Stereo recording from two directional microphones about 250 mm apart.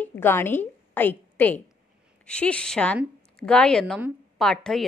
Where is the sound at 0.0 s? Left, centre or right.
Centre.